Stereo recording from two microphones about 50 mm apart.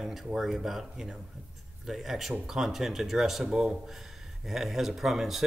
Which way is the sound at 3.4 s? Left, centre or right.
Centre.